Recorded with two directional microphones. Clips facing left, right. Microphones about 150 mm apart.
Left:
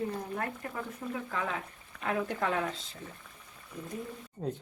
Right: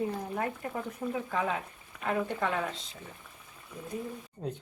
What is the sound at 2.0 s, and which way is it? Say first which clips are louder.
Speech: right 1 dB; centre (ahead or behind).